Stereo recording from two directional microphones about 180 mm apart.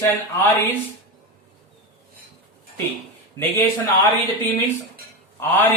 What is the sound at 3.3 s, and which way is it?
Speech, 15° left (ahead or behind).